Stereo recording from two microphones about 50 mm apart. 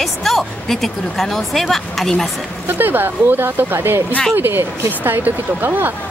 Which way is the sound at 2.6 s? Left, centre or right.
Right.